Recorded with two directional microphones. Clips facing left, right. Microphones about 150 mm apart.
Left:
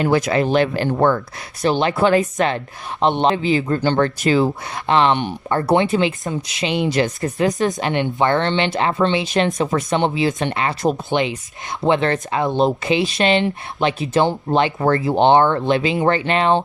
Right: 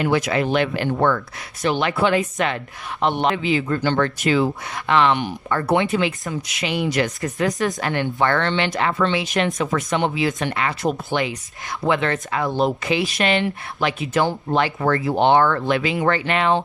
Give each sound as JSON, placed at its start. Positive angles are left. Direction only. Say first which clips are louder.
{"t": 0.0, "sound": "speech", "louder": "left 3 dB", "side_deg": 40}
{"t": 3.0, "sound": "speech", "louder": "left 3 dB", "side_deg": 25}